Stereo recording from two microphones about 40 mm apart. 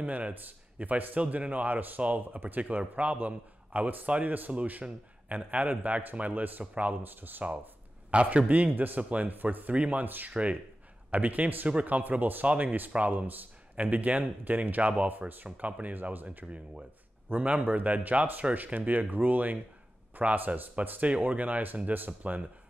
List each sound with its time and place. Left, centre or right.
0.0 s a man's voice: right
0.3 s a man's voice: right
4.8 s speech: right
5.3 s a man's voice: right
7.0 s a man's voice: right
8.1 s a man's voice: right
9.8 s a man's voice: right
10.0 s a man's voice: right
10.3 s a man's voice: right
14.8 s a man's voice: right
16.4 s a man's voice: right
17.6 s a man's voice: right
21.1 s a man's voice: right